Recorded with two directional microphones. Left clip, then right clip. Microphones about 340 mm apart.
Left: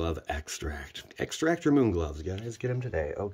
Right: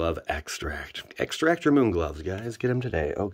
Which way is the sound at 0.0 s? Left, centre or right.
Centre.